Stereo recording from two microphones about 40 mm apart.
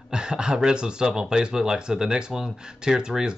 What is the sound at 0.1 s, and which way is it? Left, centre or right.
Speech, right.